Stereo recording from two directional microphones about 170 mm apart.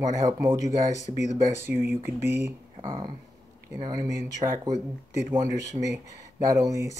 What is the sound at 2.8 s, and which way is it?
Speech, 25° right (ahead or behind).